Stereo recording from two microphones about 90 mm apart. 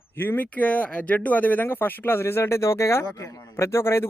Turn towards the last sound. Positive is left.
turn(degrees=30)  # may be behind; listen again after turning